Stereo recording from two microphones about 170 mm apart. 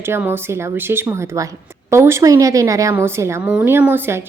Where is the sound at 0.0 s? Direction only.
15° right (ahead or behind).